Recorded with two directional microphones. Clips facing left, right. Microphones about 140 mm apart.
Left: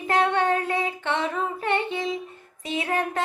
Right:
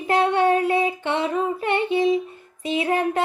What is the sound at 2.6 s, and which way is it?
Music, 20° right (ahead or behind).